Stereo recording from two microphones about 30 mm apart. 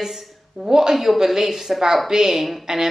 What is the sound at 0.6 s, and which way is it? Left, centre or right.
Speech, centre.